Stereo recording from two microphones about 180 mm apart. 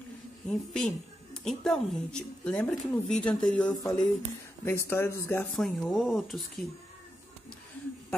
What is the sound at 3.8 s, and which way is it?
A woman's voice, 15° left (ahead or behind).